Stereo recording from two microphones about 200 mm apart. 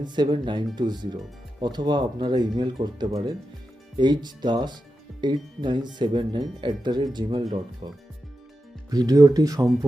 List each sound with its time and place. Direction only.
0.0 s speech: 20° right (ahead or behind)